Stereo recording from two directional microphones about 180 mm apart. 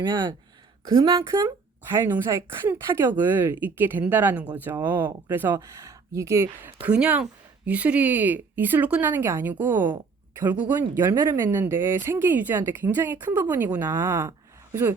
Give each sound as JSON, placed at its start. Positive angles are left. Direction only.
{"t": 0.0, "sound": "a woman's voice", "side_deg": -25}